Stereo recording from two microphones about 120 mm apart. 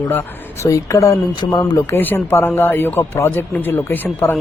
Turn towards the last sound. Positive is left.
turn(degrees=15)  # may be behind; listen again after turning